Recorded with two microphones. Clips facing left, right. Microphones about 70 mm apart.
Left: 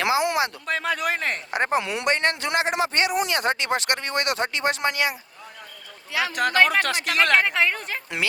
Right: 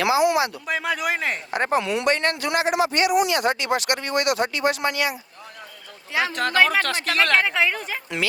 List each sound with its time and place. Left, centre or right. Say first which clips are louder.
0.0 s speech: right 3 dB; left
0.7 s speech: right 1 dB; centre
1.5 s a man's voice: right 2 dB; left
6.3 s speech: left 1 dB; centre
7.4 s speech: right 1 dB; centre